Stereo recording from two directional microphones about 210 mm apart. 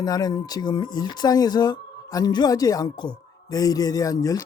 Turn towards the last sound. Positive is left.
turn(degrees=15)  # may be behind; listen again after turning